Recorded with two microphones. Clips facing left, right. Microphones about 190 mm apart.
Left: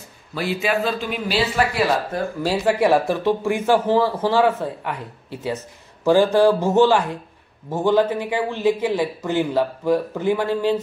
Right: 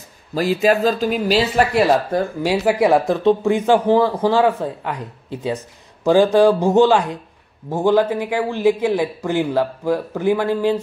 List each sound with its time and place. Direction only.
0.3 s speech: 40° right (ahead or behind)
2.1 s speech: 25° right (ahead or behind)